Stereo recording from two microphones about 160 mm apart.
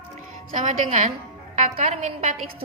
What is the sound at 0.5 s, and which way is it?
A woman's voice, 50° right (ahead or behind).